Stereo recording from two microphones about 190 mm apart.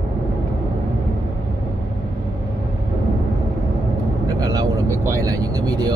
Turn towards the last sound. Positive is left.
turn(degrees=-20)  # may be behind; listen again after turning